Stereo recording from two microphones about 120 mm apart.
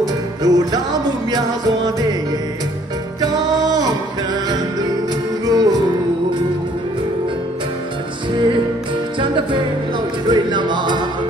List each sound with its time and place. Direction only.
0.4 s music: 30° right (ahead or behind)
3.2 s music: 30° right (ahead or behind)
5.5 s music: 35° right (ahead or behind)
9.2 s music: 45° right (ahead or behind)